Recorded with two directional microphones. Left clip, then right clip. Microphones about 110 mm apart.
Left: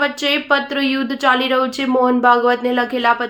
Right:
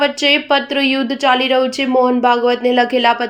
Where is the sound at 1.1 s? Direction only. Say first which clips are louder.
Right 1 dB; 15° right (ahead or behind).